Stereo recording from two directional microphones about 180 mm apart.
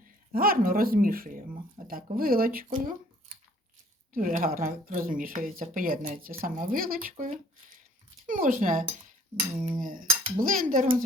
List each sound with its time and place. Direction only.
0.0 s speech: 55° right (ahead or behind)
4.1 s speech: 50° right (ahead or behind)
8.3 s speech: 50° right (ahead or behind)